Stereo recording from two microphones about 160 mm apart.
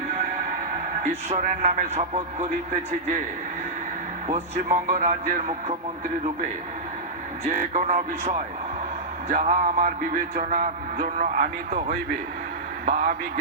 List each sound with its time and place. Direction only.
1.0 s speech: 50° right (ahead or behind)
4.3 s speech: 45° right (ahead or behind)
7.6 s speech: 50° right (ahead or behind)
9.3 s music: 55° right (ahead or behind)
12.8 s speech: 55° right (ahead or behind)